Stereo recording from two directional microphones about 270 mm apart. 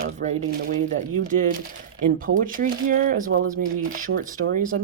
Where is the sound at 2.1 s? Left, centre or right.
Right.